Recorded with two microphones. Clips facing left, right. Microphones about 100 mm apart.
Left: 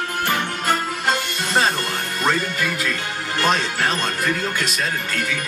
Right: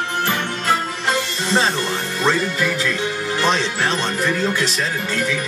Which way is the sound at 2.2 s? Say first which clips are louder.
Right 2 dB; centre (ahead or behind).